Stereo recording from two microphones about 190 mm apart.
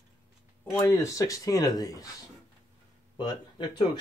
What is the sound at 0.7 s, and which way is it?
Speech, 15° left (ahead or behind).